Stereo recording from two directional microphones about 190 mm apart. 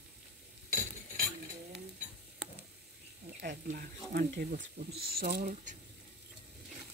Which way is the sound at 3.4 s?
50° right (ahead or behind).